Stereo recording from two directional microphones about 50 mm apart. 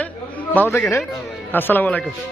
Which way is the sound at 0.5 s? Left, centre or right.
Left.